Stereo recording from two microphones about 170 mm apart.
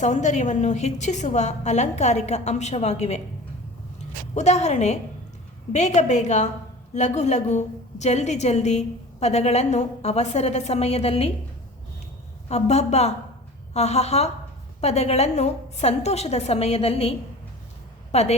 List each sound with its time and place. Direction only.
0.0 s a woman's voice: 45° left (ahead or behind)
4.4 s a woman's voice: 40° left (ahead or behind)
12.5 s a woman's voice: 40° left (ahead or behind)